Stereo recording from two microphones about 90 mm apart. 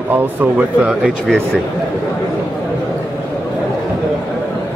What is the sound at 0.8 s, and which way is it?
Speech, centre (ahead or behind).